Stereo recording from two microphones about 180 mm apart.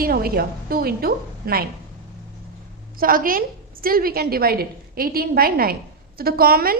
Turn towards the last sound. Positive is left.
turn(degrees=-55)  # may be behind; listen again after turning